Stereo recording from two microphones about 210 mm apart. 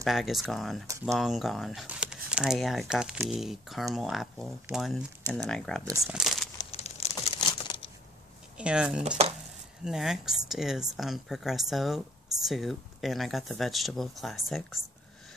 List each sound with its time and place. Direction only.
0.0 s speech: centre (ahead or behind)
5.9 s speech: 15° right (ahead or behind)
6.1 s crumpling: centre (ahead or behind)
6.6 s crumpling: 30° left (ahead or behind)
8.5 s speech: 5° right (ahead or behind)